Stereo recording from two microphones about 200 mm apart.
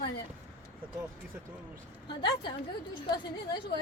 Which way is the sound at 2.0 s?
25° left (ahead or behind).